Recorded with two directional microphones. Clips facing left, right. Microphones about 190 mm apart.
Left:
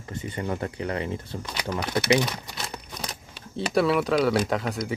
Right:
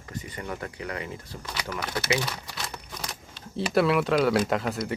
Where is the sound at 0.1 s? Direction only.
30° left (ahead or behind).